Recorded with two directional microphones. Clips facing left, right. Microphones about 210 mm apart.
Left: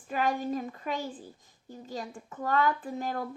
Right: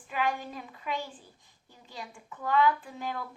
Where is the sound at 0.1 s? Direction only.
45° left (ahead or behind).